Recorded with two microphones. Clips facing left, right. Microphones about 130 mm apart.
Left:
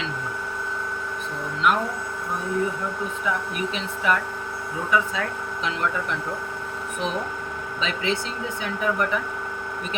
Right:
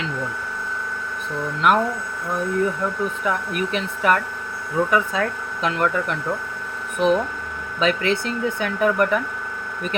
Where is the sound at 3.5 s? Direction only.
55° right (ahead or behind).